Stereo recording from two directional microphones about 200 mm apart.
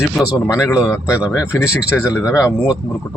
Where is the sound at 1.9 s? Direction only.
5° left (ahead or behind).